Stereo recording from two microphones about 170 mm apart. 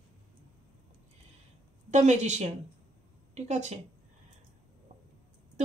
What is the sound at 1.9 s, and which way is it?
A woman's voice, 45° right (ahead or behind).